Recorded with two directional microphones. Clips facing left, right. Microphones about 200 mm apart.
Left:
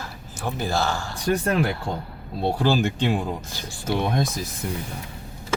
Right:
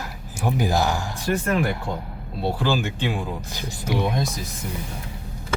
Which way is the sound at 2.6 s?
40° left (ahead or behind).